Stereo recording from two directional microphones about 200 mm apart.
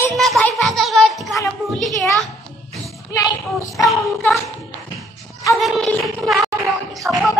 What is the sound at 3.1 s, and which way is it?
Speech, 20° left (ahead or behind).